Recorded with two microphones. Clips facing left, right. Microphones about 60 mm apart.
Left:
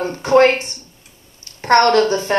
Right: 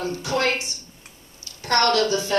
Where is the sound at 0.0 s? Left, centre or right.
Left.